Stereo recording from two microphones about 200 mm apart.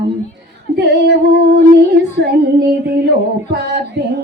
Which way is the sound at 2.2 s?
55° right (ahead or behind).